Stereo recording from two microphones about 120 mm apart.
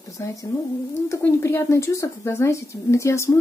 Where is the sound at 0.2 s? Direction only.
25° left (ahead or behind).